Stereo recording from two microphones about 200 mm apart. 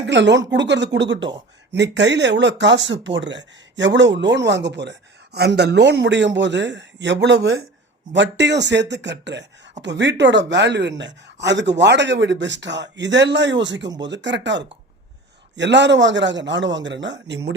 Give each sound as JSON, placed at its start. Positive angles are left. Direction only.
{"t": 0.0, "sound": "speech", "side_deg": -60}